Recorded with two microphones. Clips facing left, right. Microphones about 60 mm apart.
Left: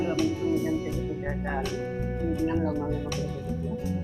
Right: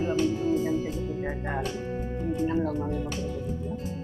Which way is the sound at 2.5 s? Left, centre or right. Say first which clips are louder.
Even; centre.